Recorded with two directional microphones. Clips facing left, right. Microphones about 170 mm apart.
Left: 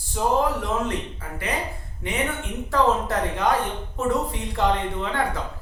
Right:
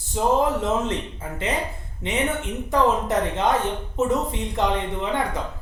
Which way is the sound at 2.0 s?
20° right (ahead or behind).